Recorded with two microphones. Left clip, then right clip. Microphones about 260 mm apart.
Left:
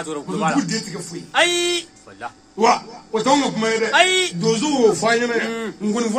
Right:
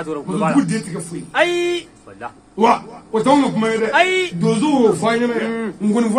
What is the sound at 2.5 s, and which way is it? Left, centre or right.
A man's voice, centre.